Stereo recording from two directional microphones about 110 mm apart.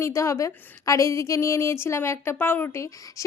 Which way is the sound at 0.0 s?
25° left (ahead or behind).